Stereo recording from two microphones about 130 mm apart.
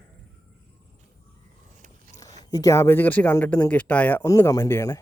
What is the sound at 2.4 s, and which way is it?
Speech, 25° left (ahead or behind).